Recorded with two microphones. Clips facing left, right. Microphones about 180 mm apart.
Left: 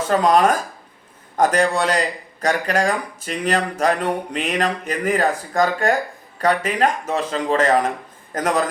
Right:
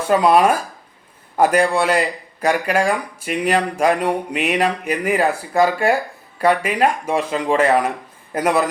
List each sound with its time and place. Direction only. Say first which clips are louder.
0.0 s a man's voice: right 2 dB; 10° right (ahead or behind)